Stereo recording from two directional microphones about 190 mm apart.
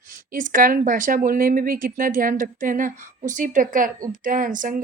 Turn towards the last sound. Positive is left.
turn(degrees=-45)  # may be behind; listen again after turning